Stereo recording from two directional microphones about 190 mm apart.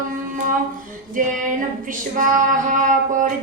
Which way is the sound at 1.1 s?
45° right (ahead or behind).